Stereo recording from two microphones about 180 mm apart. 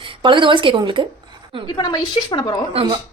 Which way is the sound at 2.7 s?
30° right (ahead or behind).